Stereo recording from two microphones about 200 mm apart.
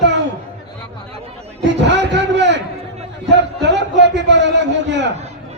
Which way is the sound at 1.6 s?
60° right (ahead or behind).